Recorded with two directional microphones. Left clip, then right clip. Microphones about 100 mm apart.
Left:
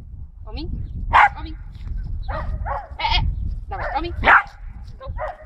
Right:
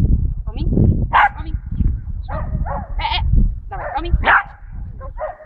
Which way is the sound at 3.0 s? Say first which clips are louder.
Even; 60° left (ahead or behind).